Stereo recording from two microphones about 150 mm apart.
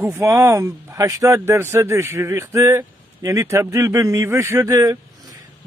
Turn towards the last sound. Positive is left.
turn(degrees=-25)  # may be behind; listen again after turning